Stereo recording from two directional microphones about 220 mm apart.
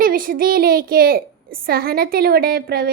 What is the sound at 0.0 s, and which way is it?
A child's voice, 40° right (ahead or behind).